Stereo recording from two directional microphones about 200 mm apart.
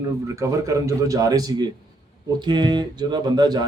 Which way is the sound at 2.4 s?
20° right (ahead or behind).